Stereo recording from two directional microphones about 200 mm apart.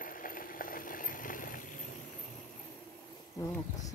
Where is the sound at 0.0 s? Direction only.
45° left (ahead or behind).